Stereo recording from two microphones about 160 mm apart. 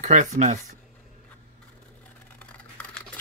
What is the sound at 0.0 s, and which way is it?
Speech, 45° right (ahead or behind).